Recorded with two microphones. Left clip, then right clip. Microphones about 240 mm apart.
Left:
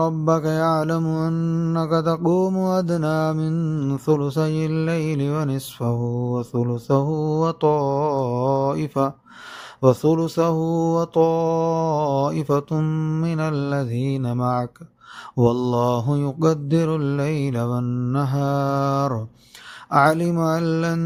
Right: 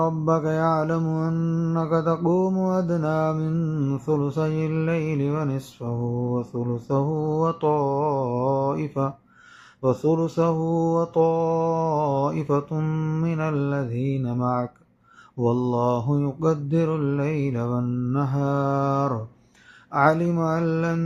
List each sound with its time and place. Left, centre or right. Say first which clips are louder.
0.0 s mantra: left 2 dB; left